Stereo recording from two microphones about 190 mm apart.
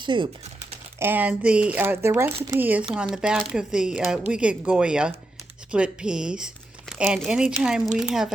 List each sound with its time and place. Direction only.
0.0 s speech: 25° right (ahead or behind)
0.9 s speech: 10° right (ahead or behind)